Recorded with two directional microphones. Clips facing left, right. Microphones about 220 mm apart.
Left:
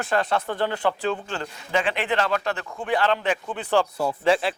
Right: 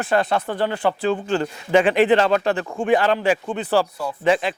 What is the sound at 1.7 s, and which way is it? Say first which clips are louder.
Speech: right 8 dB; 55° right (ahead or behind).